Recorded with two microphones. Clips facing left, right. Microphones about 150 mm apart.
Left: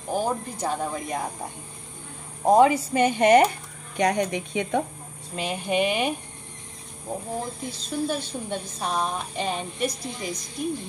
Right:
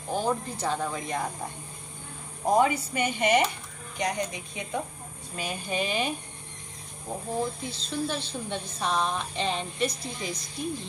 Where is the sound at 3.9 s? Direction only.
70° left (ahead or behind).